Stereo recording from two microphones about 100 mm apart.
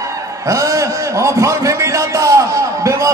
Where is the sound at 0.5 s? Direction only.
35° right (ahead or behind).